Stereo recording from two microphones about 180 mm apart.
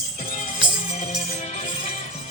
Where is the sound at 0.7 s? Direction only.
40° left (ahead or behind).